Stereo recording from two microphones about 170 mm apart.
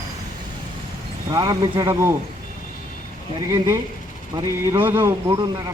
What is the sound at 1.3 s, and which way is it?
Speech, 25° right (ahead or behind).